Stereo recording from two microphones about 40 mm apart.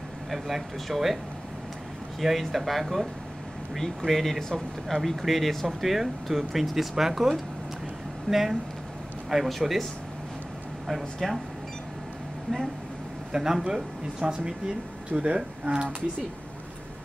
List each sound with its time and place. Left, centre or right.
0.3 s speech: centre
2.1 s speech: centre
11.1 s speech: centre
13.3 s speech: centre